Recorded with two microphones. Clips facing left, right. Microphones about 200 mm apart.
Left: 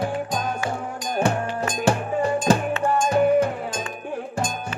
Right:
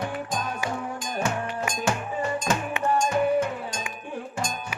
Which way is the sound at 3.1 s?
35° left (ahead or behind).